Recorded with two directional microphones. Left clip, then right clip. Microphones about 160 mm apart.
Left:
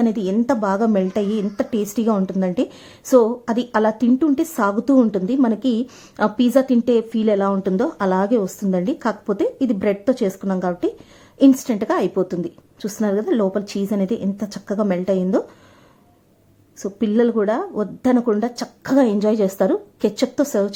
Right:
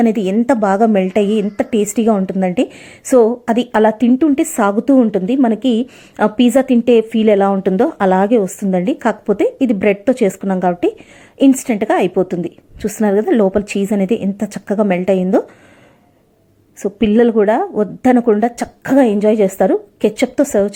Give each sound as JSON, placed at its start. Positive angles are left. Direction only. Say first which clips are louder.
{"t": 0.3, "sound": "a woman's voice", "louder": "right 6 dB", "side_deg": -10}
{"t": 5.5, "sound": "a woman's voice", "louder": "right 6 dB", "side_deg": -45}
{"t": 6.1, "sound": "a woman's voice", "louder": "right 4 dB", "side_deg": -15}
{"t": 11.3, "sound": "a woman's voice", "louder": "right 3 dB", "side_deg": -5}
{"t": 16.8, "sound": "a woman's voice", "louder": "right 6 dB", "side_deg": -15}
{"t": 18.9, "sound": "a woman's voice", "louder": "right 5 dB", "side_deg": 0}